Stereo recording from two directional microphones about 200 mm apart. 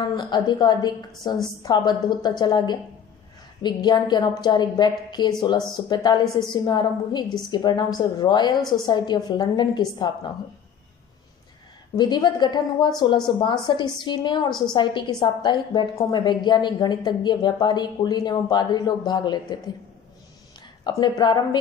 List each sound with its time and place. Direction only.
0.1 s a woman's voice: 20° left (ahead or behind)
12.0 s a woman's voice: 20° left (ahead or behind)
20.9 s a woman's voice: 20° left (ahead or behind)